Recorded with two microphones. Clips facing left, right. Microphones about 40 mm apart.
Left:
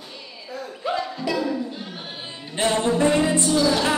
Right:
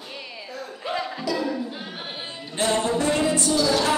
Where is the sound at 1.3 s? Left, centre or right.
Centre.